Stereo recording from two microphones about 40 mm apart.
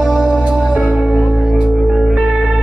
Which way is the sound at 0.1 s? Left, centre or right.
Right.